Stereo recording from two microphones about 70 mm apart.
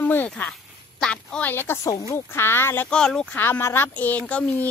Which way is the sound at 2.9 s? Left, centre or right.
Centre.